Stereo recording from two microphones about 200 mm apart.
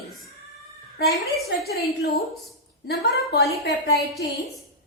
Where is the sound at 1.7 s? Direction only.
50° left (ahead or behind).